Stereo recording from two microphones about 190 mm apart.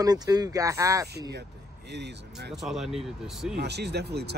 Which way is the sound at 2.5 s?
Centre (ahead or behind).